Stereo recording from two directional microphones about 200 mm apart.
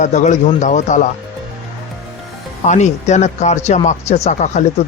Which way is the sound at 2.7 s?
35° left (ahead or behind).